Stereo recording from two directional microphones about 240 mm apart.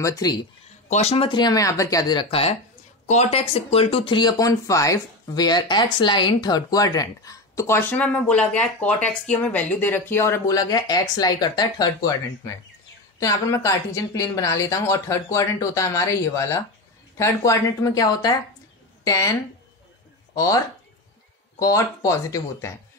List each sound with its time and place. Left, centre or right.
0.0 s speech: centre
0.8 s speech: left
20.3 s speech: centre